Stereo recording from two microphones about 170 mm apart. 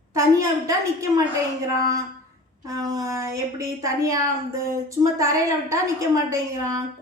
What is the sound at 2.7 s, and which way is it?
A woman's voice, 20° right (ahead or behind).